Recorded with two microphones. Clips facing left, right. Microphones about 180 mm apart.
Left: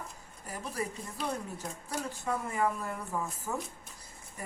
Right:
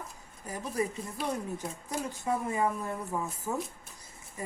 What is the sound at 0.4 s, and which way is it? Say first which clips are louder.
Speech: right 4 dB; 20° right (ahead or behind).